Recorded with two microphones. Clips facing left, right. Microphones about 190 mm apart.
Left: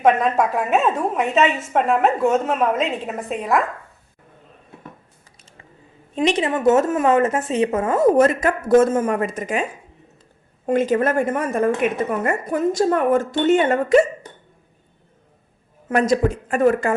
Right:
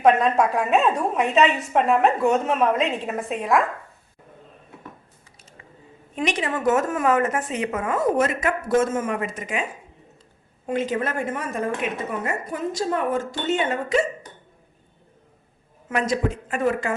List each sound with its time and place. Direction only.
0.0 s a woman's voice: centre (ahead or behind)
6.1 s speech: 25° left (ahead or behind); by 9.6 s 40° left (ahead or behind)
10.7 s a woman's voice: 50° left (ahead or behind)
15.9 s a woman's voice: 40° left (ahead or behind)